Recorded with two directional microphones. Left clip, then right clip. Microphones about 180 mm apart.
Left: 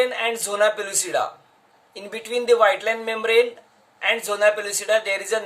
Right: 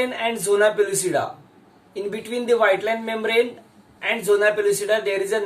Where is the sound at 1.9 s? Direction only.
40° left (ahead or behind).